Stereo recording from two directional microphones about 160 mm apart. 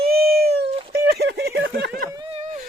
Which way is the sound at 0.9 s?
85° right.